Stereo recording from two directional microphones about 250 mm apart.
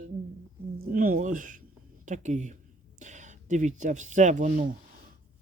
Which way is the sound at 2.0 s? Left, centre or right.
Right.